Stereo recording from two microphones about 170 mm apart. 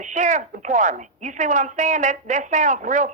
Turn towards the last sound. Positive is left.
turn(degrees=-45)  # may be behind; listen again after turning